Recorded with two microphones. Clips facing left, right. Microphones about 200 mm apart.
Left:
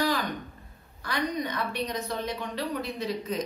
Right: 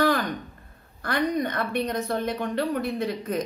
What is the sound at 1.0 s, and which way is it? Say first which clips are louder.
Speech: right 5 dB; 55° right (ahead or behind).